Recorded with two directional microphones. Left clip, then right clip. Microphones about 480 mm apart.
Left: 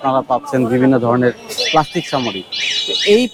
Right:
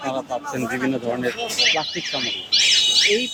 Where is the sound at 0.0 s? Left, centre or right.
Left.